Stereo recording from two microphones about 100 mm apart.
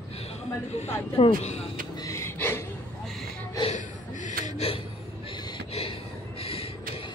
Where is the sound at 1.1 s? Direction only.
85° left.